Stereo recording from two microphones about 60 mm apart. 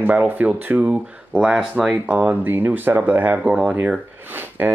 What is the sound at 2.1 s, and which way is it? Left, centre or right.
Speech, right.